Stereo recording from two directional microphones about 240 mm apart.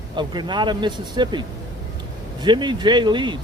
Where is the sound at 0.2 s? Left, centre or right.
Centre.